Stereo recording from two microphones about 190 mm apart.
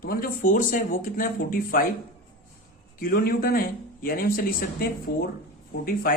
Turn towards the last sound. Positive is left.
turn(degrees=50)  # may be behind; listen again after turning